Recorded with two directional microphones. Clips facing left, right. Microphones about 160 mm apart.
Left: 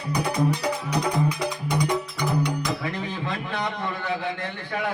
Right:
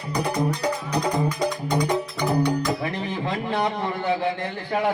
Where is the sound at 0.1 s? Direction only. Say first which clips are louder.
Even; 20° right (ahead or behind).